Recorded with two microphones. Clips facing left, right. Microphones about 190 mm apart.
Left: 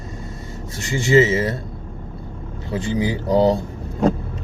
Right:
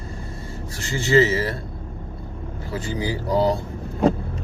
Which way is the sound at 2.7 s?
20° left (ahead or behind).